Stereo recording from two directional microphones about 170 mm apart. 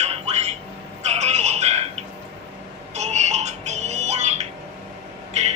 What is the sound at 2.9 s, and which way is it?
Music, 40° right (ahead or behind).